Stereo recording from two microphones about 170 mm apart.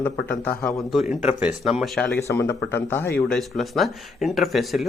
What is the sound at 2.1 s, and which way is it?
Speech, 15° left (ahead or behind).